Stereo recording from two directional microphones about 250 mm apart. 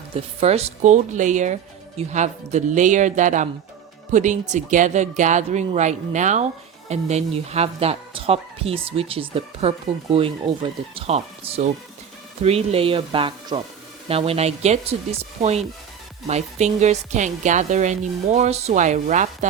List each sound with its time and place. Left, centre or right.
0.3 s speech: right